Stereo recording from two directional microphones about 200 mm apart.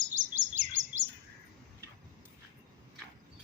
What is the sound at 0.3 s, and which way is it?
Chirp, 40° right (ahead or behind).